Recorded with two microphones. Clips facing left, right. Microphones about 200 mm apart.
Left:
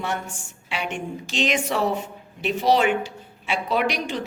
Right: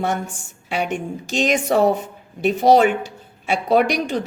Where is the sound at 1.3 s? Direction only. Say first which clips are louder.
Right 6 dB; 45° right (ahead or behind).